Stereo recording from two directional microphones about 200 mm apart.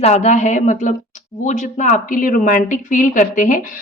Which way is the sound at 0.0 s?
35° left (ahead or behind).